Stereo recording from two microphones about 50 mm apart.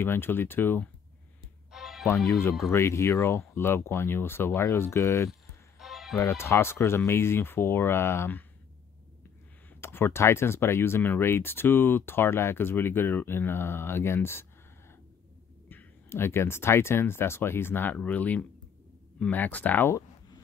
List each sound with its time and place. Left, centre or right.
0.0 s speech: left
1.7 s music: centre
2.1 s speech: centre
2.7 s speech: left
5.8 s music: centre
6.1 s speech: left
9.8 s speech: left
16.1 s speech: left
17.9 s speech: left